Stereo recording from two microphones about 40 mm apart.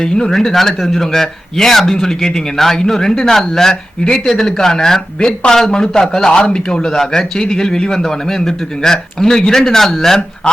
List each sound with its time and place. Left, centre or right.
0.0 s speech: left
0.3 s a man's voice: centre